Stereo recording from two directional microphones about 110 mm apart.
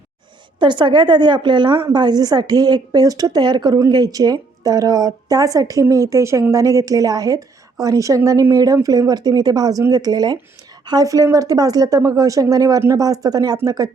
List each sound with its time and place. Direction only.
0.6 s a woman's voice: 45° right (ahead or behind)